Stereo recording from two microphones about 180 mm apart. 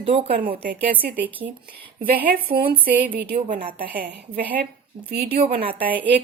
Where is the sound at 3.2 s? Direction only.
65° right (ahead or behind).